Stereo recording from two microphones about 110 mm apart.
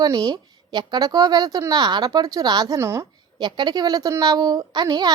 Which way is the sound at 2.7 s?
25° right (ahead or behind).